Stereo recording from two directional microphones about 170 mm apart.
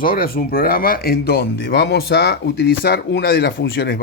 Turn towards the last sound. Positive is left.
turn(degrees=65)  # may be behind; listen again after turning